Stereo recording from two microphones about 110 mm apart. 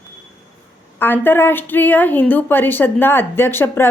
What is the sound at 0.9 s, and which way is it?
A woman's voice, 20° left (ahead or behind).